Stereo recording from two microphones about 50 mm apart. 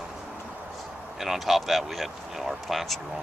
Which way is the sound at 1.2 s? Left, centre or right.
Centre.